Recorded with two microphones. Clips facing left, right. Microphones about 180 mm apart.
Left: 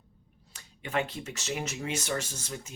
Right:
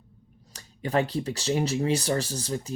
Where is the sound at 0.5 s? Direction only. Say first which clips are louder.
Right 6 dB; 35° right (ahead or behind).